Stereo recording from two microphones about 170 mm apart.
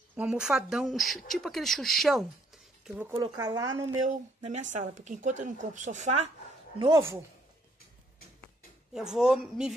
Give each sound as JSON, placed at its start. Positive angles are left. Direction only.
{"t": 0.1, "sound": "speech", "side_deg": -5}
{"t": 3.2, "sound": "speech", "side_deg": -20}
{"t": 4.4, "sound": "a woman's voice", "side_deg": -45}
{"t": 6.8, "sound": "speech", "side_deg": -15}
{"t": 8.9, "sound": "speech", "side_deg": -5}